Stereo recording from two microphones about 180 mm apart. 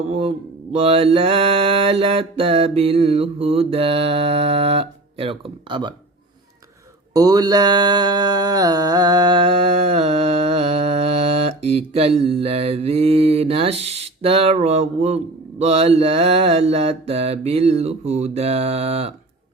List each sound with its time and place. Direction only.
0.1 s mantra: 35° right (ahead or behind)
7.1 s mantra: 20° right (ahead or behind)